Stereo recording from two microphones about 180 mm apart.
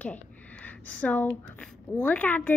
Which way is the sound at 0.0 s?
10° left (ahead or behind).